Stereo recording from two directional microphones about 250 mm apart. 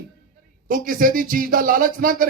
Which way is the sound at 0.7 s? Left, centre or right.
Right.